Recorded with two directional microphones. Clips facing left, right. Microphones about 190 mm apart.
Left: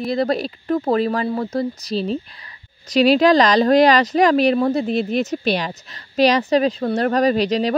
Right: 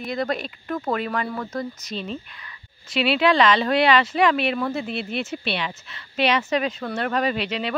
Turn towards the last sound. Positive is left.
turn(degrees=40)  # may be behind; listen again after turning